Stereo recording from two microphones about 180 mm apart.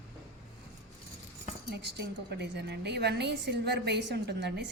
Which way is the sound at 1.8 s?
70° right (ahead or behind).